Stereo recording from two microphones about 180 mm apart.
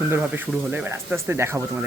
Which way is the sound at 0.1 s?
10° right (ahead or behind).